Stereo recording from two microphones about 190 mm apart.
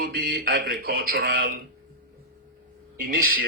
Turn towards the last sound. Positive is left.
turn(degrees=-50)  # may be behind; listen again after turning